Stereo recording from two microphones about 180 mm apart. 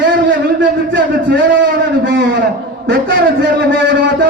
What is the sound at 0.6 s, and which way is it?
Speech, 90° right.